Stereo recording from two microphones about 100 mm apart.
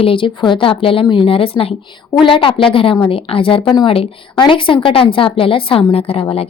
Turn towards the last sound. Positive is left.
turn(degrees=75)  # may be behind; listen again after turning